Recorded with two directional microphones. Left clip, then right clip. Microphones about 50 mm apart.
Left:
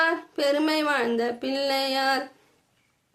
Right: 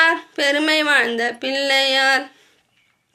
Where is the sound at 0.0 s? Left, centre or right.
Left.